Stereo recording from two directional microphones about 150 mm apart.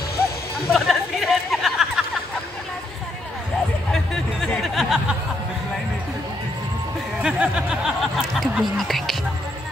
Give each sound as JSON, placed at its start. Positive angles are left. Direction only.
{"t": 0.7, "sound": "chatter", "side_deg": 0}
{"t": 3.9, "sound": "a sound", "side_deg": 5}
{"t": 7.2, "sound": "music", "side_deg": -5}